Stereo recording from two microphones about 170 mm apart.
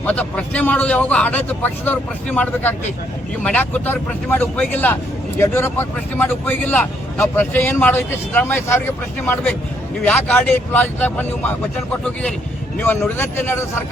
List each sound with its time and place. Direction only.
0.0 s speech: 10° left (ahead or behind)
12.7 s speech: 10° left (ahead or behind)